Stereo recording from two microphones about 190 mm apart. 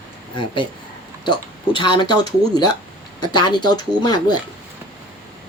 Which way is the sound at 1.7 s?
25° left (ahead or behind).